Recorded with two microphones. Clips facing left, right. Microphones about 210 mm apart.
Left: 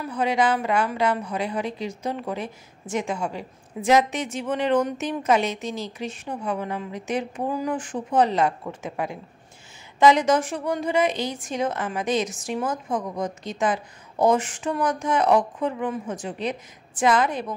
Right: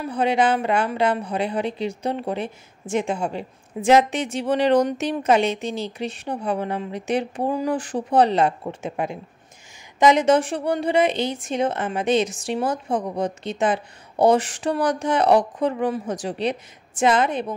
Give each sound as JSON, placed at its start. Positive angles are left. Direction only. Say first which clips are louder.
{"t": 0.0, "sound": "a woman's voice", "louder": "right 2 dB", "side_deg": -30}
{"t": 16.4, "sound": "a woman's voice", "louder": "right 4 dB", "side_deg": -25}